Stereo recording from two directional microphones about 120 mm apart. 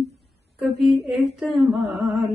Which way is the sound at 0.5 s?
Centre (ahead or behind).